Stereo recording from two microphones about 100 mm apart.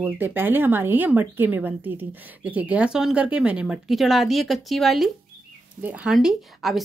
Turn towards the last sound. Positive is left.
turn(degrees=0)  # may be behind; listen again after turning